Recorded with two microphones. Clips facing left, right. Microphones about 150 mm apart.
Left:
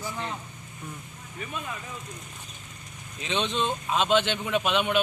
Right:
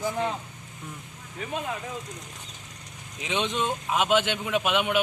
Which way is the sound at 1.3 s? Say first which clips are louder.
Right 4 dB; 75° right (ahead or behind).